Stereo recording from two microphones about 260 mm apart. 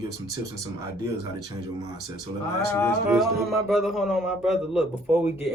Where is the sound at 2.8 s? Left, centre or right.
Centre.